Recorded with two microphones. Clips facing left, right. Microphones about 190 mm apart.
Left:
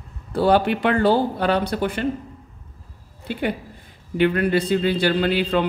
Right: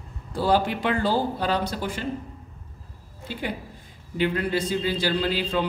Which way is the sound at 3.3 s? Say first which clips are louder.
Left 6 dB; 60° left (ahead or behind).